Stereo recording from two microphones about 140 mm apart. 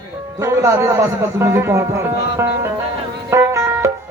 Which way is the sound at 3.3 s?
20° right (ahead or behind).